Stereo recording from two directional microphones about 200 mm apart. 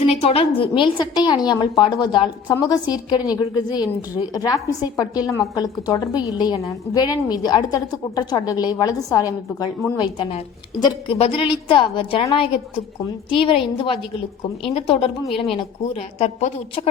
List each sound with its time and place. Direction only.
0.0 s a woman's voice: 30° left (ahead or behind)
10.8 s a woman's voice: 25° left (ahead or behind)